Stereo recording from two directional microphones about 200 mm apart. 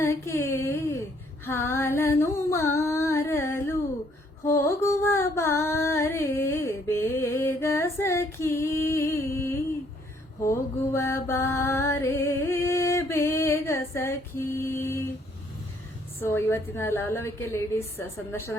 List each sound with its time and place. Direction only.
0.0 s a sound: 15° left (ahead or behind)
4.4 s music: 15° left (ahead or behind)
10.4 s mantra: 15° left (ahead or behind)
16.2 s a woman's voice: 10° left (ahead or behind)